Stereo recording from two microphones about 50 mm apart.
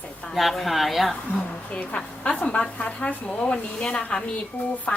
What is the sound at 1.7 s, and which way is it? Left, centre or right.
A woman's voice, left.